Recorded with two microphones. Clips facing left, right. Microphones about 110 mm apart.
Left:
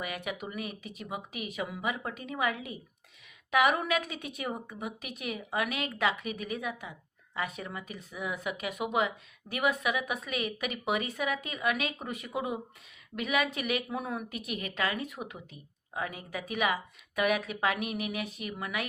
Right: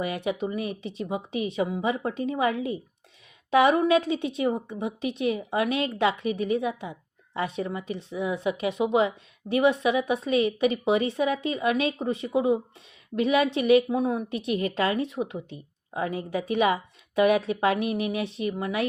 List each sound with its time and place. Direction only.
0.0 s a woman's voice: 30° right (ahead or behind)